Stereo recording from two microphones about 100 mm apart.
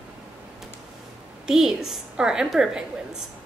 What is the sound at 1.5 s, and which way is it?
A woman's voice, 5° right (ahead or behind).